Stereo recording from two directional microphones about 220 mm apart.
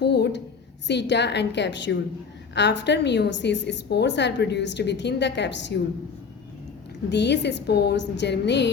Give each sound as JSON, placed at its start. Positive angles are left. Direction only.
{"t": 0.0, "sound": "a woman's voice", "side_deg": 50}
{"t": 7.1, "sound": "a woman's voice", "side_deg": 50}